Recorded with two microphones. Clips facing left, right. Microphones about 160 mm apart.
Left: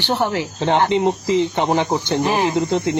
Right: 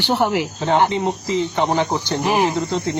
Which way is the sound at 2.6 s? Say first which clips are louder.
Left 3 dB; 20° left (ahead or behind).